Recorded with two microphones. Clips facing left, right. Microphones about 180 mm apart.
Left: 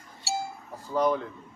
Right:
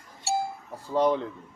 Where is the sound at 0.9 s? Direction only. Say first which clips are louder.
Right 2 dB; 25° right (ahead or behind).